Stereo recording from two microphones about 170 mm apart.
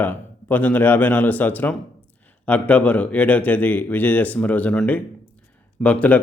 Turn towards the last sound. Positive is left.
turn(degrees=10)  # may be behind; listen again after turning